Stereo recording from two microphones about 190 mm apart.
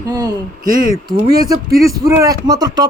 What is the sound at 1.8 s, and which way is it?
Speech, 15° right (ahead or behind).